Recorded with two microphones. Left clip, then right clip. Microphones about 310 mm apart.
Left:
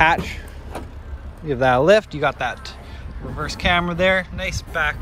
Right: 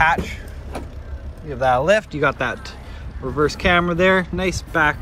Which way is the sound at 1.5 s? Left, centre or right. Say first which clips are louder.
Left 2 dB; left.